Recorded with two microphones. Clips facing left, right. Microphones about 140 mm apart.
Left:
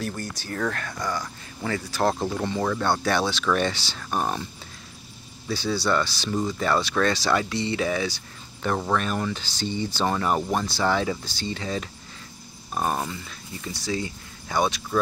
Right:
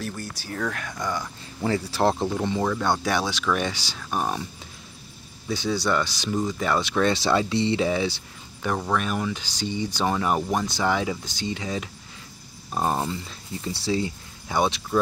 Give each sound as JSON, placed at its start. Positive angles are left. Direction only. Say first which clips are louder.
{"t": 0.0, "sound": "speech", "louder": "left 2 dB", "side_deg": -5}
{"t": 1.6, "sound": "speech", "louder": "right 2 dB", "side_deg": -25}
{"t": 5.5, "sound": "speech", "louder": "even", "side_deg": -20}
{"t": 8.9, "sound": "speech", "louder": "even", "side_deg": -5}